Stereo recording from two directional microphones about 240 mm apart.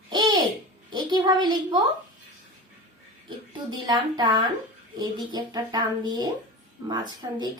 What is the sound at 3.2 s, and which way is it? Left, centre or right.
A woman's voice, centre.